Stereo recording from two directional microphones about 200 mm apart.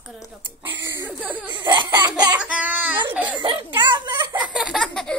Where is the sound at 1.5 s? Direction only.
25° right (ahead or behind).